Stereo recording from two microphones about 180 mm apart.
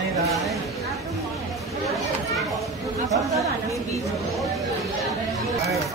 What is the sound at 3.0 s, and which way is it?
Speech, 20° right (ahead or behind).